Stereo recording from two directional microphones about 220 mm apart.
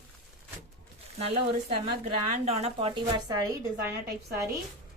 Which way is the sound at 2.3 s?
30° right (ahead or behind).